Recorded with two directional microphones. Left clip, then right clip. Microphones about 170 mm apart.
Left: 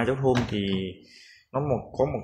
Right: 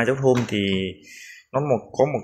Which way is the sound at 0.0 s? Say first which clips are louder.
Right 5 dB; 15° right (ahead or behind).